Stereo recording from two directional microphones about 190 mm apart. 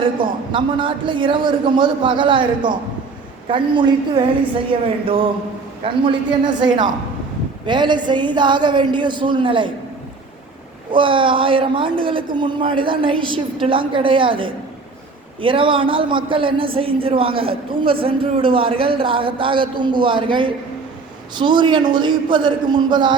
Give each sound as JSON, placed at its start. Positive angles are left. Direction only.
{"t": 0.5, "sound": "a man's voice", "side_deg": -25}
{"t": 10.9, "sound": "a man's voice", "side_deg": -25}